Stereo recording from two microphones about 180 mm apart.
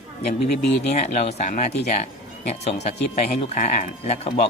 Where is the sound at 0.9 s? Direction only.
35° left (ahead or behind).